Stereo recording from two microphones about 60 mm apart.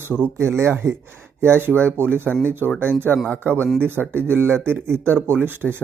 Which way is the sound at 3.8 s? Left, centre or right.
Right.